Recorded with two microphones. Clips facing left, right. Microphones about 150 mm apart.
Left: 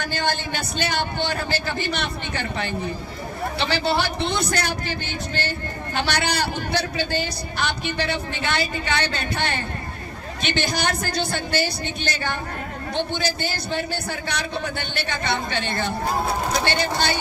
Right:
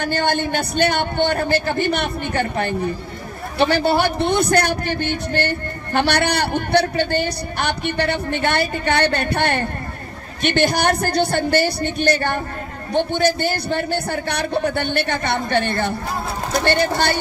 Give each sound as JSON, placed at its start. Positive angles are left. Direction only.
{"t": 0.0, "sound": "a man's voice", "side_deg": -60}